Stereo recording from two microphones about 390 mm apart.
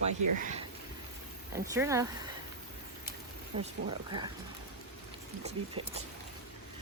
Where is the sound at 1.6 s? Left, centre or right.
Centre.